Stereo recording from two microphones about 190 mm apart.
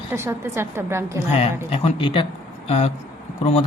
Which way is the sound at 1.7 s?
30° left (ahead or behind).